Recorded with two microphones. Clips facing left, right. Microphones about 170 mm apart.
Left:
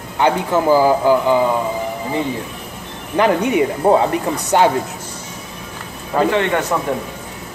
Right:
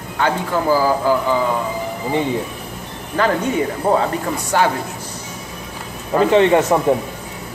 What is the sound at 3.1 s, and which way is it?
A man's voice, 15° left (ahead or behind).